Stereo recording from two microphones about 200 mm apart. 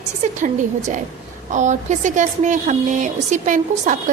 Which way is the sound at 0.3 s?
35° right (ahead or behind).